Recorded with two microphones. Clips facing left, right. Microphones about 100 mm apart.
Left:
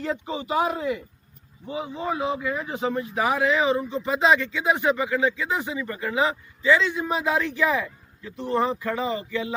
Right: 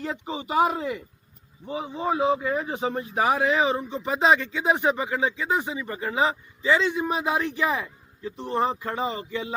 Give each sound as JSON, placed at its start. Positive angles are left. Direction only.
{"t": 0.3, "sound": "a man's voice", "side_deg": -25}